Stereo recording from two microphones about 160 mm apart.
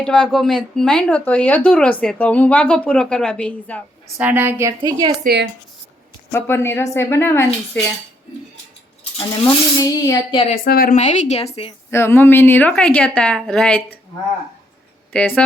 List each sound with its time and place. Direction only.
0.0 s speech: 5° left (ahead or behind)
4.2 s a woman's voice: 10° right (ahead or behind)
5.2 s speech: 90° right
6.3 s speech: 15° left (ahead or behind)
9.7 s speech: 25° left (ahead or behind)
10.5 s a woman's voice: 70° left (ahead or behind)
10.9 s a woman's voice: 45° left (ahead or behind)
11.9 s speech: 15° left (ahead or behind)
15.1 s speech: 10° left (ahead or behind)